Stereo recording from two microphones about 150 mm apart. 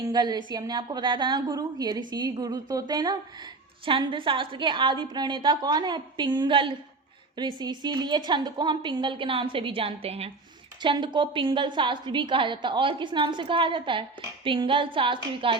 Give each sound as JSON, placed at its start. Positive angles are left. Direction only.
{"t": 0.0, "sound": "a woman's voice", "side_deg": -25}
{"t": 10.8, "sound": "a woman's voice", "side_deg": -30}